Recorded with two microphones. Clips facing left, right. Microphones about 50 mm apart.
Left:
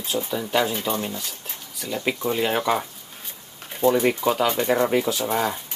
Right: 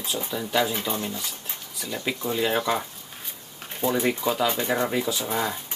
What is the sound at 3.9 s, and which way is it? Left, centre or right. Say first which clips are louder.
Speech: left 5 dB; centre.